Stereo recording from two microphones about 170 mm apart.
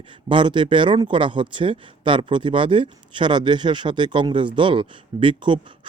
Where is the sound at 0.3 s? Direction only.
30° right (ahead or behind).